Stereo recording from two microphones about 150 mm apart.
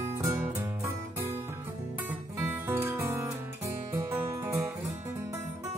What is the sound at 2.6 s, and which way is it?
Music, 15° right (ahead or behind).